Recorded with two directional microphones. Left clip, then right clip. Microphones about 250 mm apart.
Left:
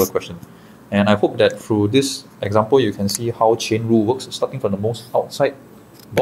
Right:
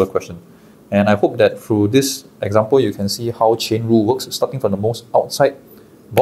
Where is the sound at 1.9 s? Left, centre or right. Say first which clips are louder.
Right 2 dB; right.